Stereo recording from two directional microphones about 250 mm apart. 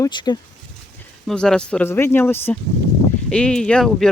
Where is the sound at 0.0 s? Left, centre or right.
Centre.